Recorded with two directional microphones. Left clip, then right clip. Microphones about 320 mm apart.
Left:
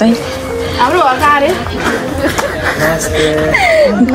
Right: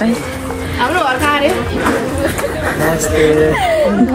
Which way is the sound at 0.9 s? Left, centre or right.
Centre.